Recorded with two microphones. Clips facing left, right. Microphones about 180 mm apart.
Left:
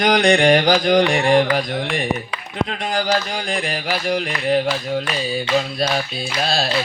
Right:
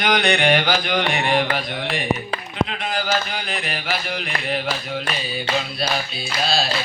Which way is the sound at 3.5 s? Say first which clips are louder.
Left 6 dB; 40° left (ahead or behind).